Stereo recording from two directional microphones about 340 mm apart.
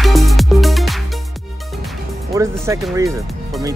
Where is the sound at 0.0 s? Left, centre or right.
Centre.